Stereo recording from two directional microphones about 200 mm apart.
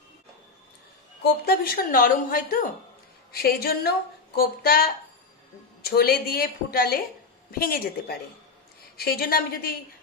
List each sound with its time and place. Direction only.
1.2 s a woman's voice: 50° left (ahead or behind)